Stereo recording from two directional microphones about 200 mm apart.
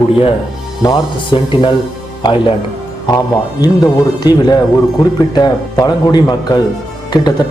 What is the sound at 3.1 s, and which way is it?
Speech, 20° left (ahead or behind).